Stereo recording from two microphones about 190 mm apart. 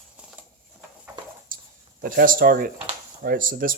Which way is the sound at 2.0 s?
50° right (ahead or behind).